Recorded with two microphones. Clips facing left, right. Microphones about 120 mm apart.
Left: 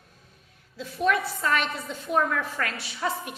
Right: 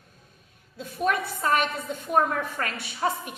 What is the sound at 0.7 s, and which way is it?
A woman's voice, 50° right (ahead or behind).